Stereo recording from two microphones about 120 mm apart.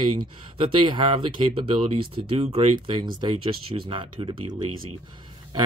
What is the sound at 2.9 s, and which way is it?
Speech, 40° right (ahead or behind).